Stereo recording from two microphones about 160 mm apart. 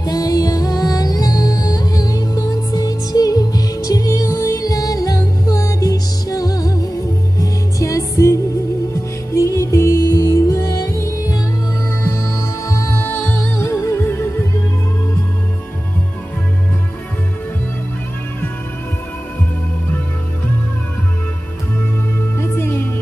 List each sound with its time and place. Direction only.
0.0 s music: 20° left (ahead or behind)
22.4 s music: 15° left (ahead or behind)